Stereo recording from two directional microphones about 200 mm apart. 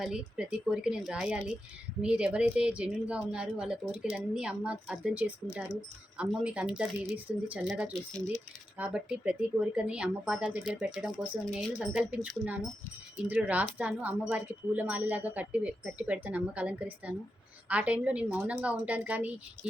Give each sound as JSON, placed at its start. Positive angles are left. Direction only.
{"t": 0.0, "sound": "speech", "side_deg": -5}